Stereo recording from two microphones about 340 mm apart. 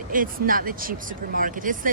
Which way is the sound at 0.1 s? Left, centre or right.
Right.